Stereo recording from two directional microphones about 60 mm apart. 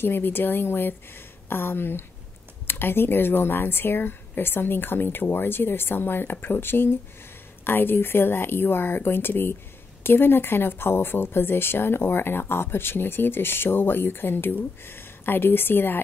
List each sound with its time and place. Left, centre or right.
0.0 s speech: left